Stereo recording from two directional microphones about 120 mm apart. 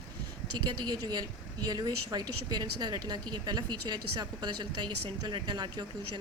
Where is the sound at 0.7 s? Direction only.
35° right (ahead or behind).